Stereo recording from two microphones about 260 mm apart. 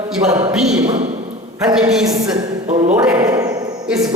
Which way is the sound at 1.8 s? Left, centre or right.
Centre.